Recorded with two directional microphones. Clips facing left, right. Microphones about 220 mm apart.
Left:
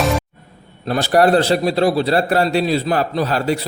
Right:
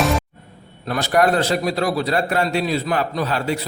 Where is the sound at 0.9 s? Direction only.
35° left (ahead or behind).